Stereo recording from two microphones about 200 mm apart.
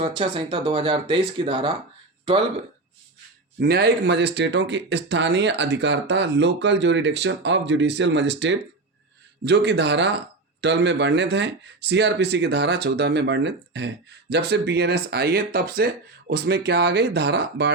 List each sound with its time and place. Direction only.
0.0 s speech: 25° right (ahead or behind)
3.6 s speech: 55° right (ahead or behind)